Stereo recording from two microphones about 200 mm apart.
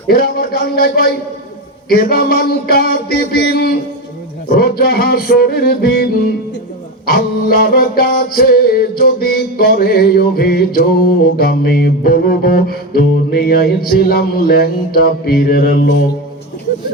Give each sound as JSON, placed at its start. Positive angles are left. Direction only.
{"t": 0.1, "sound": "music", "side_deg": 50}